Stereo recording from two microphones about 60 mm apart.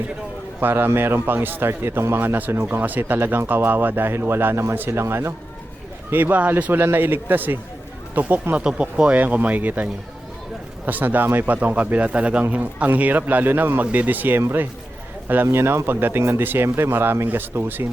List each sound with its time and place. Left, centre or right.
0.6 s a man's voice: right
3.0 s speech: right
3.2 s speech: right
6.1 s a man's voice: right
15.4 s speech: right
16.6 s speech: right